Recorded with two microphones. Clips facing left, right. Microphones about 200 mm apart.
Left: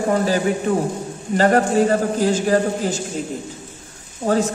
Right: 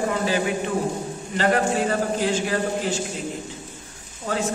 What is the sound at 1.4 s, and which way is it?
Speech, 45° left (ahead or behind).